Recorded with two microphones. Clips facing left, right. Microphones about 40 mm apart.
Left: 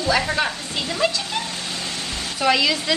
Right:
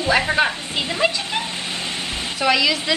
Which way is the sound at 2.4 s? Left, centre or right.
Centre.